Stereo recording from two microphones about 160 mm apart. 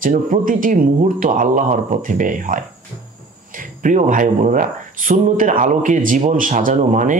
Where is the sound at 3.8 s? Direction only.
55° right (ahead or behind).